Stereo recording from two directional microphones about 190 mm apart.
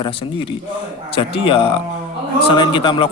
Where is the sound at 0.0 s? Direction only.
30° left (ahead or behind).